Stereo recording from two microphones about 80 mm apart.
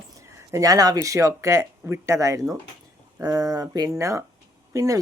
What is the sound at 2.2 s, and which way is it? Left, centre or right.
Speech, right.